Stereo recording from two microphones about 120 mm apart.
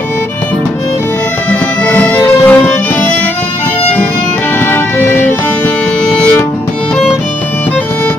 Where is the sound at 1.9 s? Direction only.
10° left (ahead or behind).